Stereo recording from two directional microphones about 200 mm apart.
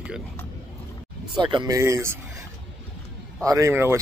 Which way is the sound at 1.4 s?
20° right (ahead or behind).